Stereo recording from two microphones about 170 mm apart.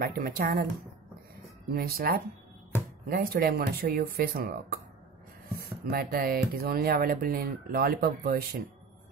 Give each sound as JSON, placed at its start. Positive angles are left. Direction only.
{"t": 0.0, "sound": "speech", "side_deg": -55}
{"t": 1.7, "sound": "speech", "side_deg": -60}
{"t": 5.6, "sound": "speech", "side_deg": -65}